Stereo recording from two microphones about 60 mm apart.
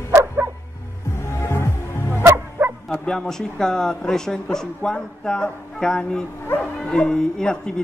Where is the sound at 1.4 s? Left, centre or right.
Left.